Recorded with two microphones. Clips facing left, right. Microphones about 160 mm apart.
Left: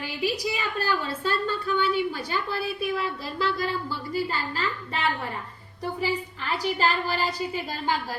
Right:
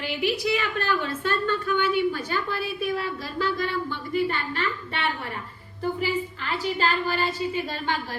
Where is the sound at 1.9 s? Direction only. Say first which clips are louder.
Right 2 dB; 40° left (ahead or behind).